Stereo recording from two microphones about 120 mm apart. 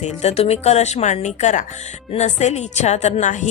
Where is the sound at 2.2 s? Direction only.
70° left (ahead or behind); by 3.5 s 90° left.